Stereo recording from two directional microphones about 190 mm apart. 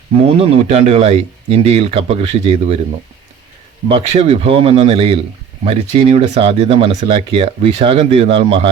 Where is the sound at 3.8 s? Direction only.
30° right (ahead or behind).